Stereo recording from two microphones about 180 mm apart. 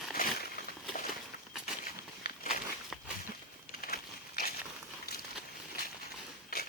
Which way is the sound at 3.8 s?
55° left (ahead or behind).